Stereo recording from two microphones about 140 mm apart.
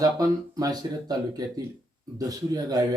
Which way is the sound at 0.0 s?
25° right (ahead or behind).